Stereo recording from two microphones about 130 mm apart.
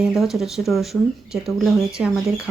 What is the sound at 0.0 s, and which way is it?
Speech, centre (ahead or behind).